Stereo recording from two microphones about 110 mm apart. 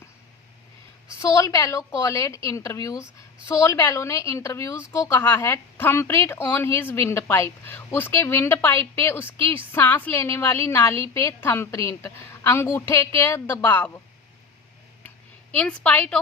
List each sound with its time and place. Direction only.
1.2 s a woman's voice: 30° left (ahead or behind)
15.5 s a woman's voice: 10° left (ahead or behind)